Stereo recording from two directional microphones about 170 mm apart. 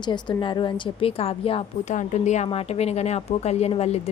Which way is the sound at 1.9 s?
45° left (ahead or behind).